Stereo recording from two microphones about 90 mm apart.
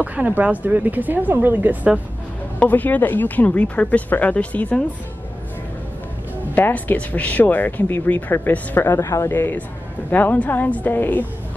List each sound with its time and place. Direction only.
0.0 s speech: 15° right (ahead or behind)
2.6 s speech: 20° left (ahead or behind)
6.5 s speech: 20° left (ahead or behind)
9.0 s speech: 35° left (ahead or behind)
9.3 s speech: 20° left (ahead or behind)